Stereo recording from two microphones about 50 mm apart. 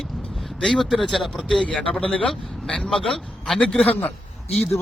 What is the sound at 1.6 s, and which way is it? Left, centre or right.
A man's voice, left.